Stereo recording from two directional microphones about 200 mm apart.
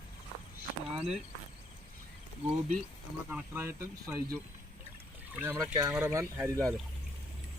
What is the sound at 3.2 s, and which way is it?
Speech, 10° right (ahead or behind).